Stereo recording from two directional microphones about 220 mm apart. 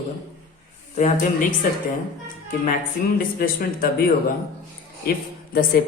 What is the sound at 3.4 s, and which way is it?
Speech, 40° left (ahead or behind).